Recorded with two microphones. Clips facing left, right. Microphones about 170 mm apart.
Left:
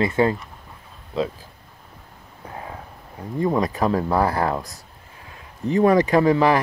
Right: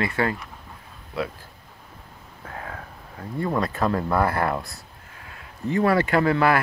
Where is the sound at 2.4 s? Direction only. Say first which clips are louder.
Left 1 dB; 20° left (ahead or behind).